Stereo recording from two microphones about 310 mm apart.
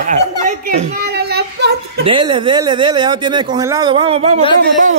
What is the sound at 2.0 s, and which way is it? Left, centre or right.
Speech, centre.